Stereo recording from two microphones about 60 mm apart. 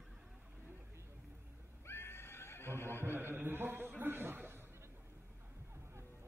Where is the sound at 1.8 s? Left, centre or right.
Left.